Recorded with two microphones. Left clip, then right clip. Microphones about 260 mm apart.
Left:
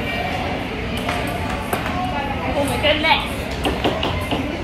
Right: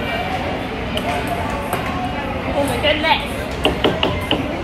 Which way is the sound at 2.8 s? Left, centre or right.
Centre.